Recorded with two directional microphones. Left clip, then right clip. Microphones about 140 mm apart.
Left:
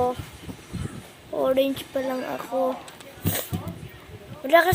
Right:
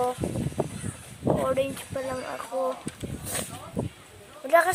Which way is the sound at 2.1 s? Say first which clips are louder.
Left 4 dB; 20° left (ahead or behind).